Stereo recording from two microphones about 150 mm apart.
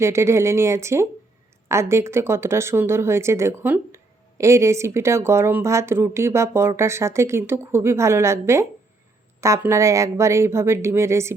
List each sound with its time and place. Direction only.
0.0 s a woman's voice: 20° right (ahead or behind)